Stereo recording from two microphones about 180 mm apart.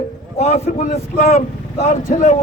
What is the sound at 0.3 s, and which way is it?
A man's voice, 40° left (ahead or behind).